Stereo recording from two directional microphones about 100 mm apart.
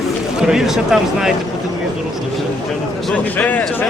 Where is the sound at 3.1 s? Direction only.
15° left (ahead or behind).